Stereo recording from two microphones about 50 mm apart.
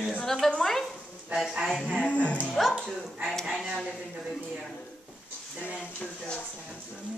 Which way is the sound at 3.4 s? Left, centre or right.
Centre.